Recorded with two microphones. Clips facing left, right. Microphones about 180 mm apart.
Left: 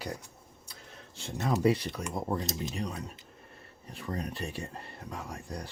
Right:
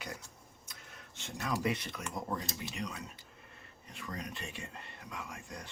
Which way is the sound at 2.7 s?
35° left (ahead or behind).